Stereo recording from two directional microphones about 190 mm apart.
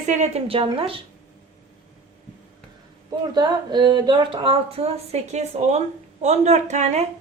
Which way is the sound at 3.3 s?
25° right (ahead or behind).